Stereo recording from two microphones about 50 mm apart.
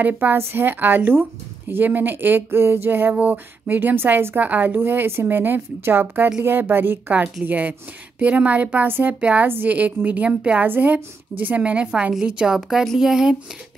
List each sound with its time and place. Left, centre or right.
0.0 s speech: right
0.4 s a woman's voice: right
4.4 s a woman's voice: right; by 13.4 s centre